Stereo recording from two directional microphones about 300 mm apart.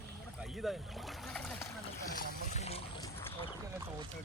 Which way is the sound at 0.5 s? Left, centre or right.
Centre.